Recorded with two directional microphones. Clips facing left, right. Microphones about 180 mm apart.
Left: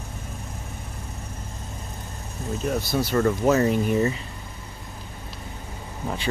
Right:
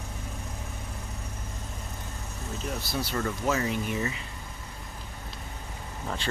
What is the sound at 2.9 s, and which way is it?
Speech, 45° left (ahead or behind).